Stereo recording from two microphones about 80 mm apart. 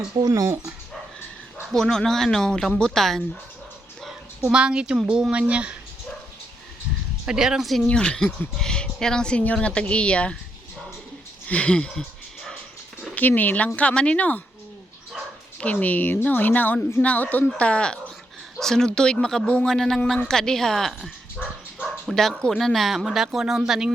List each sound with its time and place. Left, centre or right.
0.3 s speech: right
1.7 s speech: centre
4.4 s a woman's voice: centre
7.3 s a woman's voice: centre
7.9 s speech: centre
11.4 s speech: centre
13.1 s a woman's voice: left
15.6 s a woman's voice: centre
21.4 s dog: left
22.1 s speech: centre